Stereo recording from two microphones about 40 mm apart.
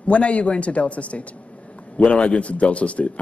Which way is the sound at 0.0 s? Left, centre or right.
Left.